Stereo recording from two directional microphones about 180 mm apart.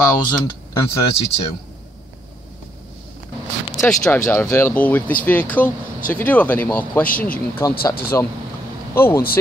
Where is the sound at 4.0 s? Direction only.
15° left (ahead or behind).